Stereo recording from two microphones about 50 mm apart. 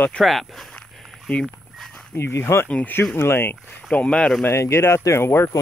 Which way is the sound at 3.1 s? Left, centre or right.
Left.